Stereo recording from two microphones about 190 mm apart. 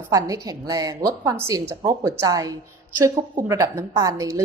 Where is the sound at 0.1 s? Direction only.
20° right (ahead or behind).